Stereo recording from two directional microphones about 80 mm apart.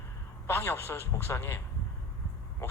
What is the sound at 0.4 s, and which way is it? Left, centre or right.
A man's voice, left.